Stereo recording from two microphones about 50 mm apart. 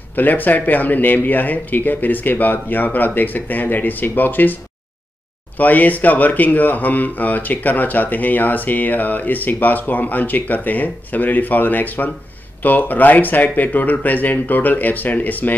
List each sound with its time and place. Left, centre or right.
0.1 s speech: left
5.6 s speech: left